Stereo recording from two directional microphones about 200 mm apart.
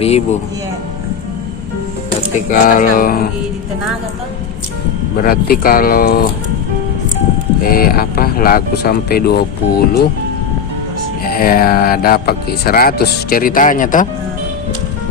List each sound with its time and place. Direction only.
2.5 s speech: 45° left (ahead or behind)
5.1 s speech: 45° left (ahead or behind)
7.7 s speech: 50° left (ahead or behind)
11.3 s speech: 45° left (ahead or behind)